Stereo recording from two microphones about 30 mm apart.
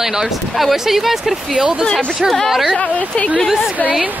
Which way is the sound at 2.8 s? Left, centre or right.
Left.